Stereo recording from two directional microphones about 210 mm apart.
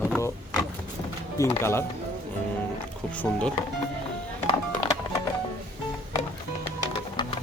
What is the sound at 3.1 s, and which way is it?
Speech, 5° left (ahead or behind).